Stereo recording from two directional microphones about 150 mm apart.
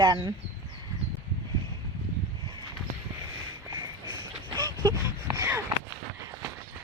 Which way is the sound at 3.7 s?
25° right (ahead or behind).